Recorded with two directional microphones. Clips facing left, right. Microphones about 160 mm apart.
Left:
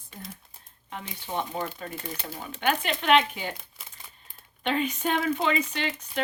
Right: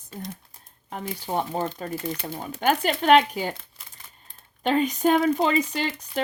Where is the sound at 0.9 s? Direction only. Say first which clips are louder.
Right 6 dB; 40° right (ahead or behind).